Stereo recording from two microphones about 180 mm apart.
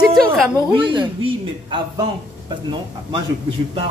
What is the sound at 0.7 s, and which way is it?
A man's voice, 30° right (ahead or behind).